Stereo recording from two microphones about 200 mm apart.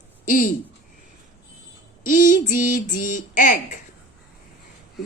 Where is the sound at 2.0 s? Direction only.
40° left (ahead or behind).